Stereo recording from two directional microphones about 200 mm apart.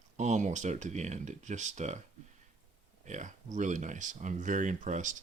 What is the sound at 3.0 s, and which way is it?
Speech, 35° right (ahead or behind).